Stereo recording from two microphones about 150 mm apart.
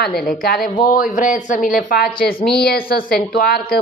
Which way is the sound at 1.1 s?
60° left (ahead or behind).